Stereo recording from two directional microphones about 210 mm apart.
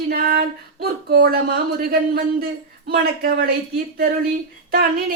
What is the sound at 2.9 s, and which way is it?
Speech, 45° right (ahead or behind).